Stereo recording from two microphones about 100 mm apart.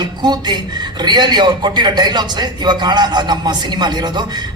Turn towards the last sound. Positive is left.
turn(degrees=-45)  # may be behind; listen again after turning